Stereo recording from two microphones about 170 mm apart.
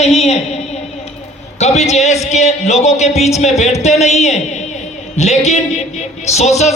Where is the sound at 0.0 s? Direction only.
40° left (ahead or behind).